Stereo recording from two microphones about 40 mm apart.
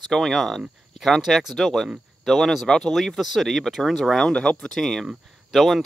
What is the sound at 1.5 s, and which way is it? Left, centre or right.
Speech, centre.